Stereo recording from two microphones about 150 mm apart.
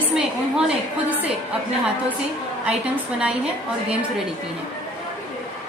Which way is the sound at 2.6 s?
5° right (ahead or behind).